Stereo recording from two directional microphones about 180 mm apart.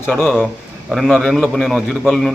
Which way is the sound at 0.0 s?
10° left (ahead or behind).